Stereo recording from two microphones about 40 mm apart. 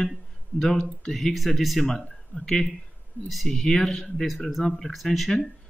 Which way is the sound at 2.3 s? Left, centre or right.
Left.